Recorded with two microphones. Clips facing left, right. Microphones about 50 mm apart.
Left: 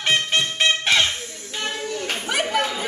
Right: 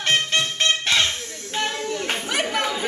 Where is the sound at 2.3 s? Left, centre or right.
Centre.